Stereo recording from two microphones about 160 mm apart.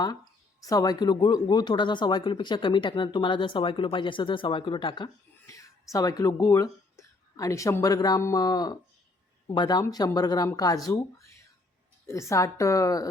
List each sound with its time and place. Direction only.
0.6 s speech: 25° left (ahead or behind)